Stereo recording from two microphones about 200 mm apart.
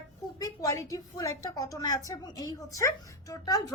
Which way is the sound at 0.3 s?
15° left (ahead or behind).